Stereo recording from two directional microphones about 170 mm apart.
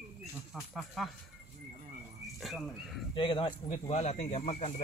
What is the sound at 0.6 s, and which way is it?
Speech, centre (ahead or behind).